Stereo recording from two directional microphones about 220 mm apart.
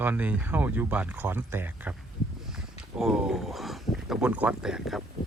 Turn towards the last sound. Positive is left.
turn(degrees=0)  # may be behind; listen again after turning